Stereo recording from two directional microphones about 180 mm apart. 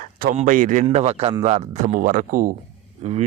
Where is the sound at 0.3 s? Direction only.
45° right (ahead or behind).